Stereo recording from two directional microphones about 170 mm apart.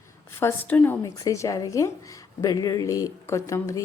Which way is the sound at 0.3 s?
15° left (ahead or behind).